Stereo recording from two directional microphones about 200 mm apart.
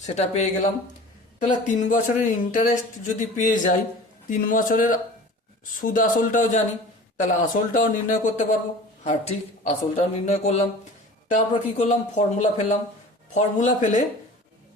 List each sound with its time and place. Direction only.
0.1 s a man's voice: 35° left (ahead or behind)